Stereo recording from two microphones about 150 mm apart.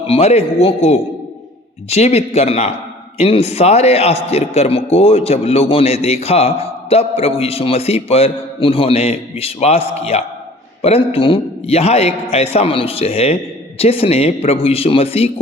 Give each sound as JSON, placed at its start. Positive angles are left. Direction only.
{"t": 0.1, "sound": "a man's voice", "side_deg": 45}